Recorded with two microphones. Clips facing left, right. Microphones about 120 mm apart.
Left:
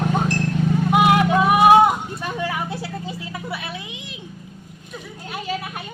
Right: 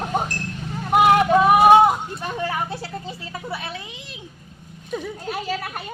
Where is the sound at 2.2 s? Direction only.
30° right (ahead or behind).